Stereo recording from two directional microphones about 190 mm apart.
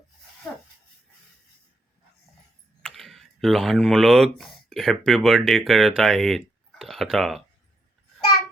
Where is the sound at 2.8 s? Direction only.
Centre (ahead or behind).